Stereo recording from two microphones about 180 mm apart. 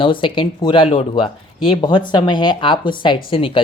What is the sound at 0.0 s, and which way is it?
Speech, 30° left (ahead or behind).